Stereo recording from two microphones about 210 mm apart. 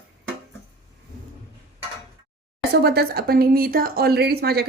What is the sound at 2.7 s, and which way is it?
Speech, 50° right (ahead or behind).